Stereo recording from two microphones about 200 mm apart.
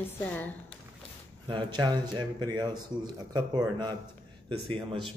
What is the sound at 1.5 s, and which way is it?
Speech, 25° right (ahead or behind).